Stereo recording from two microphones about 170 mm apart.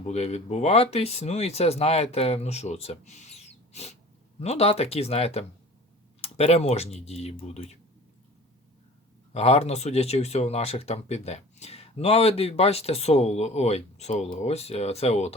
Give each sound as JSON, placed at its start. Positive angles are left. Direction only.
{"t": 0.0, "sound": "speech", "side_deg": 40}
{"t": 9.3, "sound": "speech", "side_deg": 40}